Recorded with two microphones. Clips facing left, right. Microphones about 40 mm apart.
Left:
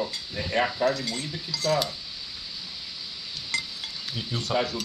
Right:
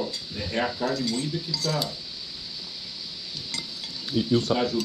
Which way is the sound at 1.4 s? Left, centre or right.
Left.